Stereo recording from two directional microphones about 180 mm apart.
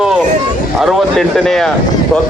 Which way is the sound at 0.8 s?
Centre (ahead or behind).